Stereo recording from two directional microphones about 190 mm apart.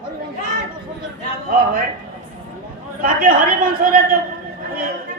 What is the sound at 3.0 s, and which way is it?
A woman's voice, 50° right (ahead or behind).